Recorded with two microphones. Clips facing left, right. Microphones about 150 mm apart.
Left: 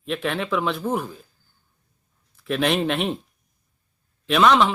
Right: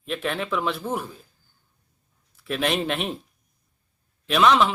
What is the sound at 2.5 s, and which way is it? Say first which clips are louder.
Speech: left 3 dB; centre (ahead or behind).